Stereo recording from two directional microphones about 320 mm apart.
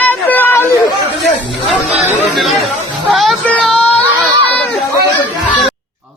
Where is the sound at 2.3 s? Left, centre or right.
Centre.